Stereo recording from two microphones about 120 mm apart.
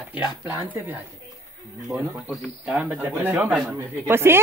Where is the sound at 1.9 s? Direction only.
10° right (ahead or behind).